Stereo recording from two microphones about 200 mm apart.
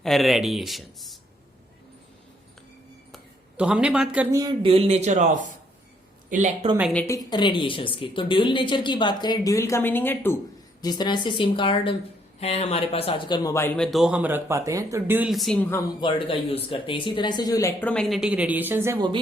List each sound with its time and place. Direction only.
0.0 s speech: centre (ahead or behind)
3.6 s speech: 5° right (ahead or behind)
4.3 s speech: 20° right (ahead or behind); by 6.7 s 35° right (ahead or behind)
7.3 s a woman's voice: 25° left (ahead or behind); by 15.5 s centre (ahead or behind)
16.0 s speech: 25° left (ahead or behind); by 19.2 s 20° right (ahead or behind)